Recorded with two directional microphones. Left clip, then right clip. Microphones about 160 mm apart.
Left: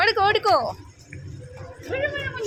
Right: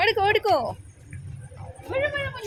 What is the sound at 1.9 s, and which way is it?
Speech, 20° right (ahead or behind).